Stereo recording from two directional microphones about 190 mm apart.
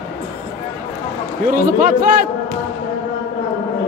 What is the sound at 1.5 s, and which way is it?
Speech, 50° right (ahead or behind).